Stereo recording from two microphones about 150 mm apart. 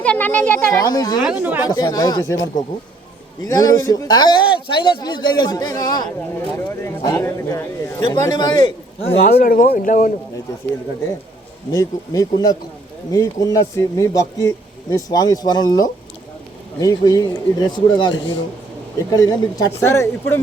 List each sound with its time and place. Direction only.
0.0 s a child's voice: 10° left (ahead or behind)
0.7 s speech: 25° left (ahead or behind)
1.2 s speech: 10° right (ahead or behind)
1.6 s speech: 25° left (ahead or behind)
9.1 s speech: 85° left; by 10.1 s 65° left (ahead or behind)
11.7 s speech: 25° left (ahead or behind)